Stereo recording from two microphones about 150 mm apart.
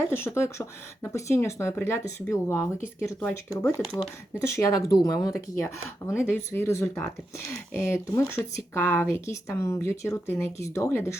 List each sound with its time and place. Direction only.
0.1 s speech: 15° left (ahead or behind)